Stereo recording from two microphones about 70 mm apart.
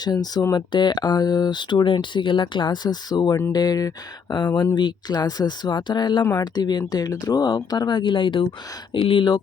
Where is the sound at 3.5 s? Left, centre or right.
Left.